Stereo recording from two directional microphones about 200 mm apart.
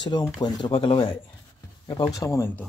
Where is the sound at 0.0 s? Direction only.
20° left (ahead or behind).